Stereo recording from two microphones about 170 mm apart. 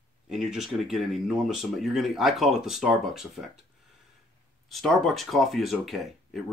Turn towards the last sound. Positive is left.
turn(degrees=0)  # may be behind; listen again after turning